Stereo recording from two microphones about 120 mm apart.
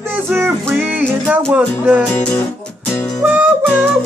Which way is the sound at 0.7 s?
15° right (ahead or behind).